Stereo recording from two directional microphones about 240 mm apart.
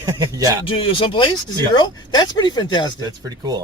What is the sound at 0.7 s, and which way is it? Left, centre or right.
Speech, left.